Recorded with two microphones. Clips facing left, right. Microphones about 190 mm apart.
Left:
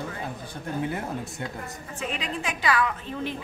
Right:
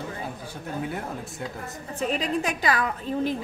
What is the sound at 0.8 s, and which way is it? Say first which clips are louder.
Speech: left 2 dB; centre (ahead or behind).